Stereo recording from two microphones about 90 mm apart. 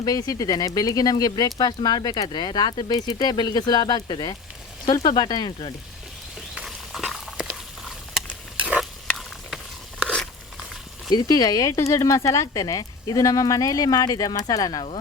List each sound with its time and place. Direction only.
0.0 s speech: 45° left (ahead or behind)
6.5 s a sound: 5° right (ahead or behind)
8.5 s stir: 15° right (ahead or behind)
8.8 s sizzle: centre (ahead or behind)
10.0 s a sound: 10° left (ahead or behind)
11.1 s speech: 45° left (ahead or behind)